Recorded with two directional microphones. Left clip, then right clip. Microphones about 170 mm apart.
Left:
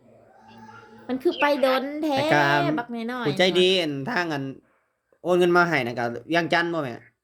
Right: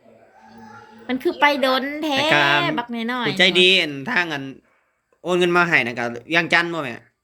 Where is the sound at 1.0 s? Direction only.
Centre (ahead or behind).